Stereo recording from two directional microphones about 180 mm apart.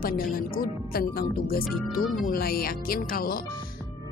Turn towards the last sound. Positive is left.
turn(degrees=55)  # may be behind; listen again after turning